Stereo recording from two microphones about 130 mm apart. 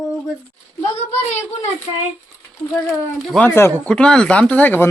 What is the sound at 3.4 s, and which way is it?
Speech, 15° left (ahead or behind).